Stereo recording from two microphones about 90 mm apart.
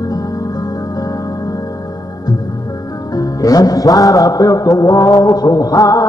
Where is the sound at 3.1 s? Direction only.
45° left (ahead or behind).